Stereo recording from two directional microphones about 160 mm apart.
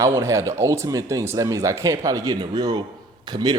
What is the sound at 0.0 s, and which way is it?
Speech, 20° right (ahead or behind).